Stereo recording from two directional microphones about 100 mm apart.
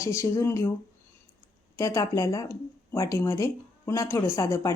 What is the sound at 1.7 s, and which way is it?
Speech, 35° left (ahead or behind).